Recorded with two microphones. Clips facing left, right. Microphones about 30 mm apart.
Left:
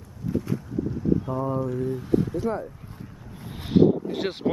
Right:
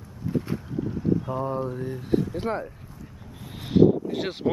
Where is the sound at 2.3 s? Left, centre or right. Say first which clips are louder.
Left 1 dB; right.